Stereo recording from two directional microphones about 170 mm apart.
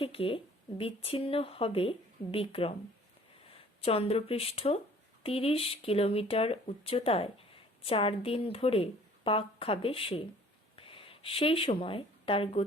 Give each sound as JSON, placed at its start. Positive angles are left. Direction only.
{"t": 0.0, "sound": "speech", "side_deg": 35}
{"t": 3.8, "sound": "speech", "side_deg": 35}